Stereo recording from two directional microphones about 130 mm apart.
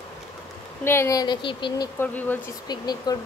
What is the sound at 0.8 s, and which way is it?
Speech, 20° left (ahead or behind).